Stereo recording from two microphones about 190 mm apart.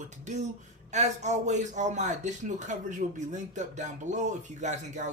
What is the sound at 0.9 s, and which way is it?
A man's voice, 35° right (ahead or behind).